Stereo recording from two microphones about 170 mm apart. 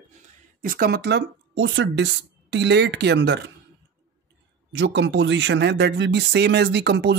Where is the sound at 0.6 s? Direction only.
60° right (ahead or behind); by 3.5 s 85° right.